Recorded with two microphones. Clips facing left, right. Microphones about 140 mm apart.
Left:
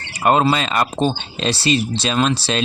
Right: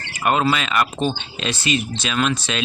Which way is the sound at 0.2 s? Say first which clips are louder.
Left 3 dB; 30° left (ahead or behind).